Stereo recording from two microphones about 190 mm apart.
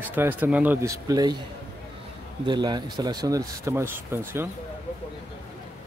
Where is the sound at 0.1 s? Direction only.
10° right (ahead or behind).